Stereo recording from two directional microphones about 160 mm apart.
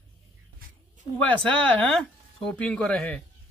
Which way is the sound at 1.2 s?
10° left (ahead or behind).